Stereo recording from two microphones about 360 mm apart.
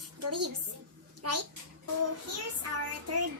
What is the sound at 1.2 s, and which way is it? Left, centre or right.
Child singing, right.